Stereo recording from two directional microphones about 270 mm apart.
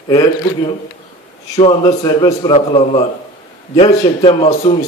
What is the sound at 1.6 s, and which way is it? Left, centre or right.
A man's voice, centre.